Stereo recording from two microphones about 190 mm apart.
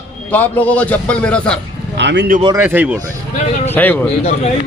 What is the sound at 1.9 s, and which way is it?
Speech, 65° right (ahead or behind).